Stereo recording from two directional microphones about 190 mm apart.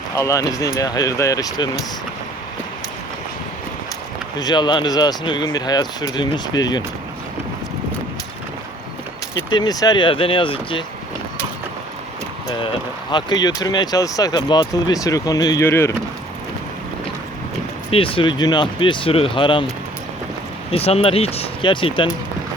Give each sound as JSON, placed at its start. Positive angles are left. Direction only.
{"t": 0.2, "sound": "speech", "side_deg": 15}
{"t": 4.4, "sound": "speech", "side_deg": 20}
{"t": 9.3, "sound": "speech", "side_deg": 20}
{"t": 12.5, "sound": "speech", "side_deg": 25}
{"t": 17.9, "sound": "speech", "side_deg": 30}
{"t": 20.7, "sound": "speech", "side_deg": 30}